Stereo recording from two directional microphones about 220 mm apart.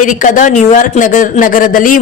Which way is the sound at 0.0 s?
35° left (ahead or behind).